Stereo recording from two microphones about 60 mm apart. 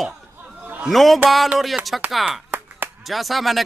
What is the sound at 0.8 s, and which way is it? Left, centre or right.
Speech, centre.